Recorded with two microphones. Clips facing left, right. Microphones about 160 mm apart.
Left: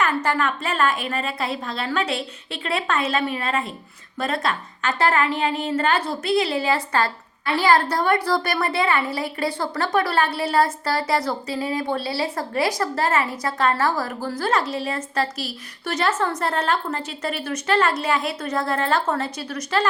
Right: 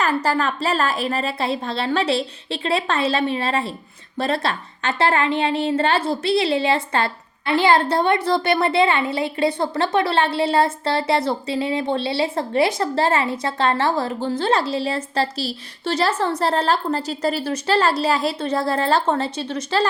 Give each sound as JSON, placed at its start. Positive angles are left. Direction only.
{"t": 0.0, "sound": "a woman's voice", "side_deg": -35}